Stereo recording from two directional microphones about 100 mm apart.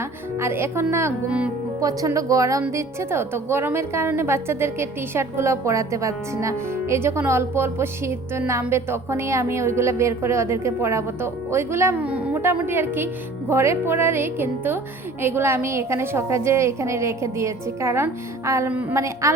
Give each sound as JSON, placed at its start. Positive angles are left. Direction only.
{"t": 0.3, "sound": "a woman's voice", "side_deg": -25}
{"t": 11.9, "sound": "a woman's voice", "side_deg": -15}
{"t": 18.7, "sound": "a woman's voice", "side_deg": -15}
{"t": 18.9, "sound": "a woman's voice", "side_deg": -30}